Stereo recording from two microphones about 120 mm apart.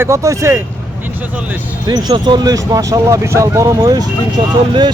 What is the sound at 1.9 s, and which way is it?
Speech, 35° right (ahead or behind).